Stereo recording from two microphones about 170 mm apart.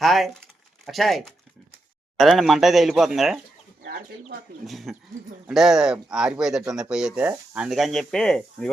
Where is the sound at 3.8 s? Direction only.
65° right (ahead or behind).